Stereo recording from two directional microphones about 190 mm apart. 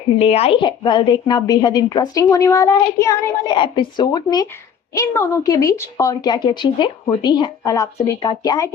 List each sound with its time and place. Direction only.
0.2 s a woman's voice: 30° left (ahead or behind)